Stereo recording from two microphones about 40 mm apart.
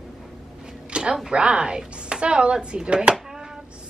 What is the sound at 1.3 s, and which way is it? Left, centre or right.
Speech, right.